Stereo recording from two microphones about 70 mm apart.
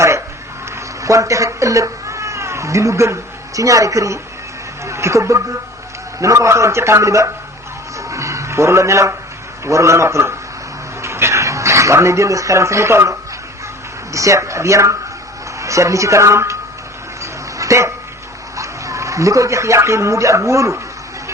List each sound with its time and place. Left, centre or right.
1.0 s a man's voice: right
7.9 s music: right
9.6 s a man's voice: right
11.0 s a sound: right
14.1 s a man's voice: right
17.6 s dog: right
18.5 s speech: right